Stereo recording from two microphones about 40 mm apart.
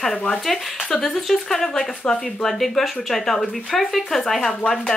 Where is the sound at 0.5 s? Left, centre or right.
Centre.